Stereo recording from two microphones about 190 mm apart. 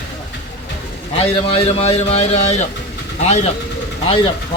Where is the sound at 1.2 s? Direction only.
30° left (ahead or behind).